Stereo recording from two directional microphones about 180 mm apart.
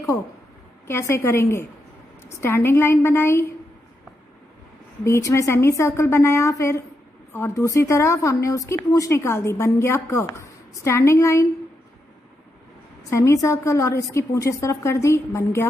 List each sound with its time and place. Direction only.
0.8 s speech: 15° left (ahead or behind)
5.0 s speech: 15° left (ahead or behind)
13.1 s speech: 15° left (ahead or behind)